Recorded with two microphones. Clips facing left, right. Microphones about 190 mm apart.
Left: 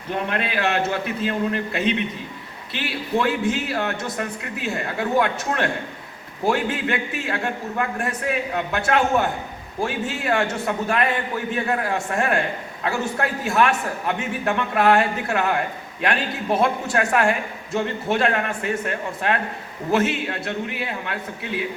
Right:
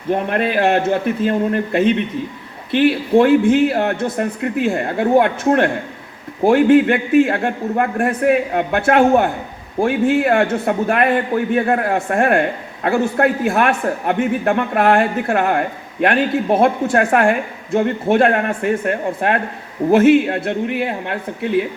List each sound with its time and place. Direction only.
0.1 s a man's voice: 50° right (ahead or behind)